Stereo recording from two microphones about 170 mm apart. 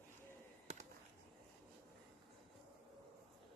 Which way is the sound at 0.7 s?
45° right (ahead or behind).